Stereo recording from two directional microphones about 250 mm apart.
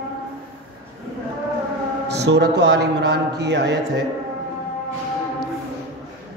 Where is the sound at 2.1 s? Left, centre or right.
Right.